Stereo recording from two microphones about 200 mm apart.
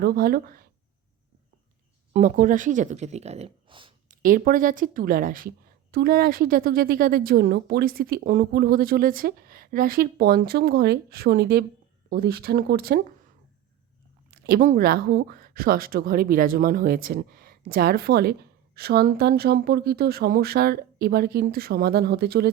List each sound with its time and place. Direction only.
0.0 s speech: 50° right (ahead or behind)
2.1 s speech: 40° right (ahead or behind)
4.1 s speech: 40° right (ahead or behind)
14.3 s speech: 50° right (ahead or behind)